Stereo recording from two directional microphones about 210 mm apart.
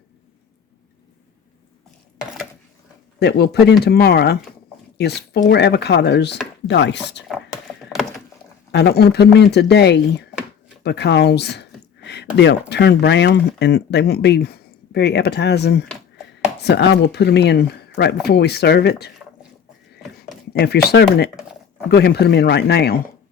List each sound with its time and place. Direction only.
3.2 s speech: 50° left (ahead or behind)
7.3 s a sound: centre (ahead or behind)
8.7 s speech: 50° left (ahead or behind)
20.5 s speech: 50° left (ahead or behind)